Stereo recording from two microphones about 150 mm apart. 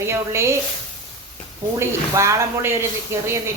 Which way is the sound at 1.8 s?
20° right (ahead or behind).